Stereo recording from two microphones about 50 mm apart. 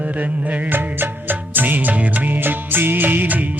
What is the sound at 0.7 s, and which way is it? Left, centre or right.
Music, right.